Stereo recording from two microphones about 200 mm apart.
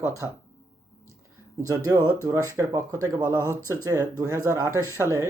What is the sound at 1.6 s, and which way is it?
Speech, 15° right (ahead or behind).